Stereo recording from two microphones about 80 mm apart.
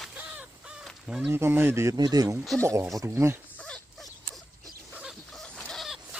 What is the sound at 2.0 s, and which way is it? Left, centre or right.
Speech, right.